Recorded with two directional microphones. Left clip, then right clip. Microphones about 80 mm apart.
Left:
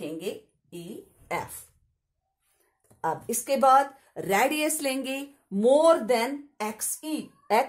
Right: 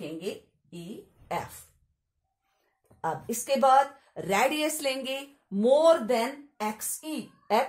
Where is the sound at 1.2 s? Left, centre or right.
Left.